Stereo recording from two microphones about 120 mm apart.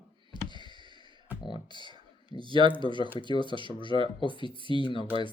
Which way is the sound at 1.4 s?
40° left (ahead or behind).